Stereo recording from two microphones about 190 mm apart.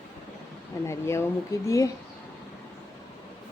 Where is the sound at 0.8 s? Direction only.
15° left (ahead or behind).